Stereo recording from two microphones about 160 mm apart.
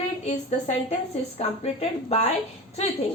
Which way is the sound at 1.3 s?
40° left (ahead or behind).